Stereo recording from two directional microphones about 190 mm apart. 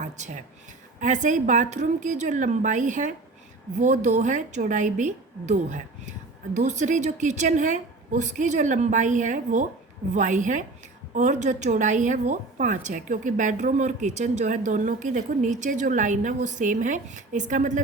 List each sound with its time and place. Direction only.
0.0 s a woman's voice: 40° right (ahead or behind)